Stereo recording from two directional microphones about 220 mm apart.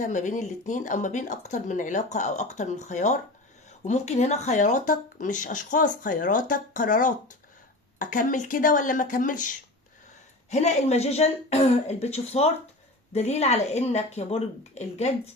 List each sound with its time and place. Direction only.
0.0 s speech: 35° left (ahead or behind)